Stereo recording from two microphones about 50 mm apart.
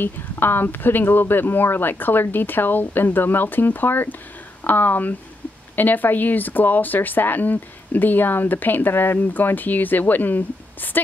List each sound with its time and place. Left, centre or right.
0.0 s speech: left